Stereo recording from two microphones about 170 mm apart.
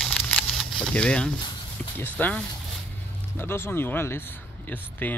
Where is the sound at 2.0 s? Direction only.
10° left (ahead or behind).